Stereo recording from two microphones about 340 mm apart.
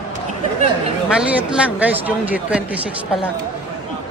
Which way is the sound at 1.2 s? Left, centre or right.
Centre.